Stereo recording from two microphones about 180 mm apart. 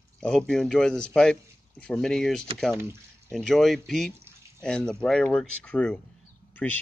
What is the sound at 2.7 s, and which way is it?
Speech, 15° right (ahead or behind).